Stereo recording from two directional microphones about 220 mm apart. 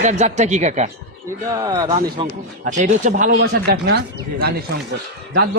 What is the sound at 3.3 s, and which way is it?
Speech, 50° right (ahead or behind).